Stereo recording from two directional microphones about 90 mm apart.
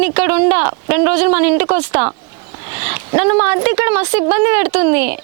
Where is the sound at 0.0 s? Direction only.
25° right (ahead or behind).